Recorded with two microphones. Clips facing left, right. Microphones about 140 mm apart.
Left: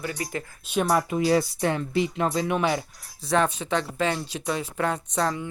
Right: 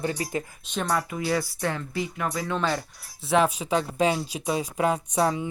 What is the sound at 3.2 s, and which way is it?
Speech, 5° right (ahead or behind).